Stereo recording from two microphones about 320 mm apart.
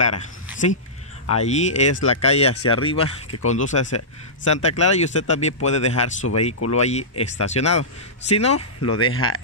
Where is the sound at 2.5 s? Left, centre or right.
Left.